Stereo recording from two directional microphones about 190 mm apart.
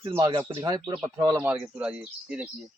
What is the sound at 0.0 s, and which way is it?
Speech, 15° right (ahead or behind).